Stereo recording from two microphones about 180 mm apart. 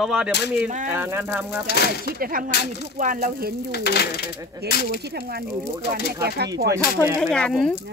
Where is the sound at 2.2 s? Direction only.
50° right (ahead or behind).